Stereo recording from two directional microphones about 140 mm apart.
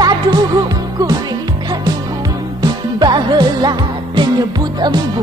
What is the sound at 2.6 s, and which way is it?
Music, 30° right (ahead or behind).